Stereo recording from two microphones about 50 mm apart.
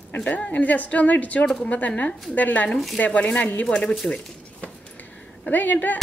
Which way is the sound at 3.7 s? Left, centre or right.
Centre.